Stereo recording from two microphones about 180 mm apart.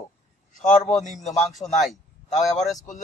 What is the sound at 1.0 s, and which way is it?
Speech, 40° left (ahead or behind).